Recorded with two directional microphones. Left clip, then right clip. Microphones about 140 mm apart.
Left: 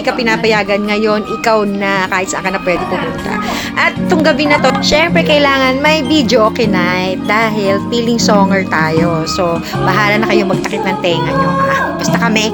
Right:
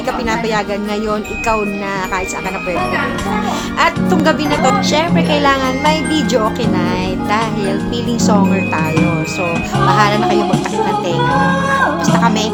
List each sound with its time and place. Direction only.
0.3 s speech: 30° left (ahead or behind)
3.8 s speech: 25° left (ahead or behind)
12.0 s speech: 30° left (ahead or behind)